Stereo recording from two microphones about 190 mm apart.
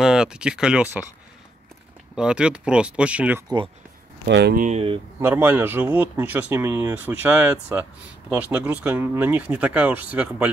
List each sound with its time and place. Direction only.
0.0 s speech: 5° right (ahead or behind)
2.1 s speech: 5° right (ahead or behind)
3.4 s speech: 25° right (ahead or behind)
4.3 s speech: 65° right (ahead or behind)
4.6 s speech: 35° right (ahead or behind)
5.2 s speech: 10° right (ahead or behind)